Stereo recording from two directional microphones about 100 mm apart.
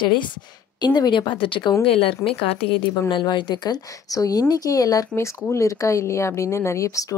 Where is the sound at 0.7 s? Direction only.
45° left (ahead or behind).